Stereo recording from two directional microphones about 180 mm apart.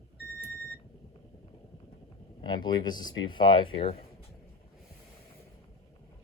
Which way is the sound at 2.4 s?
25° left (ahead or behind).